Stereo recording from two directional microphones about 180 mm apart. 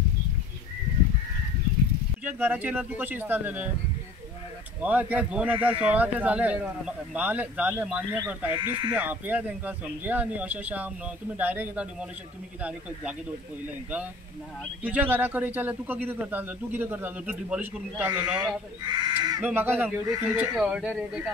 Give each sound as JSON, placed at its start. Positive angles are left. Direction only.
{"t": 2.2, "sound": "a man's voice", "side_deg": -10}
{"t": 4.8, "sound": "a man's voice", "side_deg": -10}
{"t": 14.8, "sound": "a man's voice", "side_deg": -10}
{"t": 18.1, "sound": "speech", "side_deg": -20}
{"t": 19.4, "sound": "a man's voice", "side_deg": -10}